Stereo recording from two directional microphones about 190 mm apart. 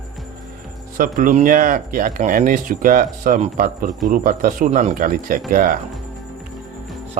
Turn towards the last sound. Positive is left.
turn(degrees=-45)  # may be behind; listen again after turning